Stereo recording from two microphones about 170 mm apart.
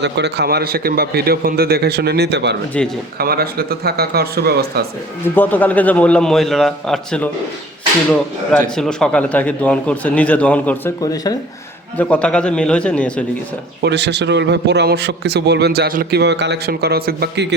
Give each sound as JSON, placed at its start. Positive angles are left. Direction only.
{"t": 0.0, "sound": "a man's voice", "side_deg": -80}
{"t": 3.2, "sound": "speech", "side_deg": -65}
{"t": 5.3, "sound": "speech", "side_deg": 10}
{"t": 8.7, "sound": "speech", "side_deg": 5}
{"t": 11.0, "sound": "speech", "side_deg": 20}
{"t": 11.9, "sound": "speech", "side_deg": 5}
{"t": 13.8, "sound": "a man's voice", "side_deg": -85}